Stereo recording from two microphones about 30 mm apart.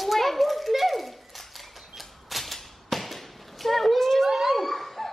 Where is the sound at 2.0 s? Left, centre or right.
Centre.